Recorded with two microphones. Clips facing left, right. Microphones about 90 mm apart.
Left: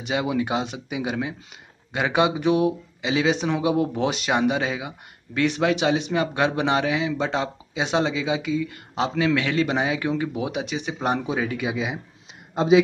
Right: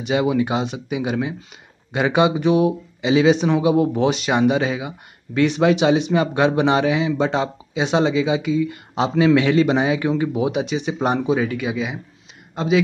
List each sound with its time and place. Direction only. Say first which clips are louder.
0.0 s speech: right 5 dB; centre (ahead or behind)
12.5 s speech: left 2 dB; 20° left (ahead or behind)